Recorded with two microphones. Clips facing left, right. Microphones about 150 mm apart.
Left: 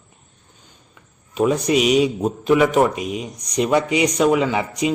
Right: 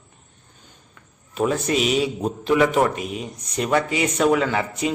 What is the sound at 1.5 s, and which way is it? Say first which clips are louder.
Speech: left 5 dB; 15° left (ahead or behind).